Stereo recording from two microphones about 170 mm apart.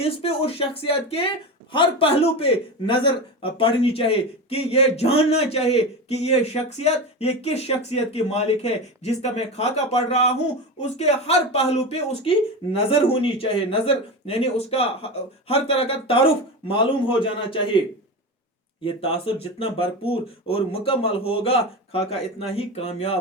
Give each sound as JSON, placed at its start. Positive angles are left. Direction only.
{"t": 0.0, "sound": "a man's voice", "side_deg": 35}
{"t": 18.9, "sound": "a man's voice", "side_deg": 35}